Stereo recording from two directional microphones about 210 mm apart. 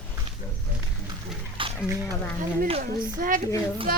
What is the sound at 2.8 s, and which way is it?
Speech, 40° right (ahead or behind).